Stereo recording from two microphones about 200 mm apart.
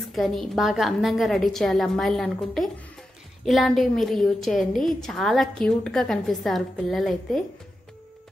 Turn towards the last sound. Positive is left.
turn(degrees=0)  # may be behind; listen again after turning